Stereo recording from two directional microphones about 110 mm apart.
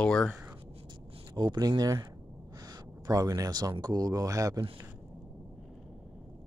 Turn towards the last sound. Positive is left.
turn(degrees=-30)  # may be behind; listen again after turning